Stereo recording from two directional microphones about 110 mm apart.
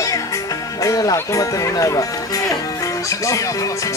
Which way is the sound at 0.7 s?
30° left (ahead or behind).